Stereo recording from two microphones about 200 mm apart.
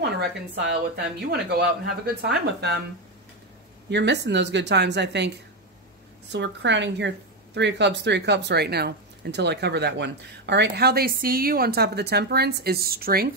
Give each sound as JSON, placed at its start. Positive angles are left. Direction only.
{"t": 0.0, "sound": "a woman's voice", "side_deg": -55}
{"t": 3.9, "sound": "a woman's voice", "side_deg": -60}
{"t": 6.3, "sound": "a woman's voice", "side_deg": -60}